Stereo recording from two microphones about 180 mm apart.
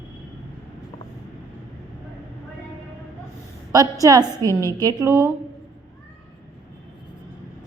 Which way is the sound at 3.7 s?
20° right (ahead or behind).